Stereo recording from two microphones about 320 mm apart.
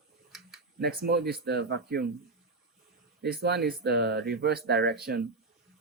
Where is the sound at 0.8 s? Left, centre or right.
Right.